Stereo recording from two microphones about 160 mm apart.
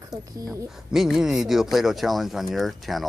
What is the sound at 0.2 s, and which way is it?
Speech, 20° right (ahead or behind).